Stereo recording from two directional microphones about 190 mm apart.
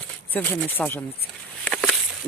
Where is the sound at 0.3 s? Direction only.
10° left (ahead or behind).